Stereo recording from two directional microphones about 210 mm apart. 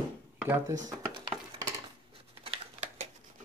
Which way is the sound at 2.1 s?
30° right (ahead or behind).